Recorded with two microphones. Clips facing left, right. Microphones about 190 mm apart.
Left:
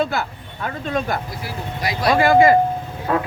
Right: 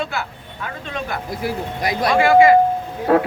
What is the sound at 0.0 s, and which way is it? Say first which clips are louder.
Speech: left 4 dB; 40° left (ahead or behind).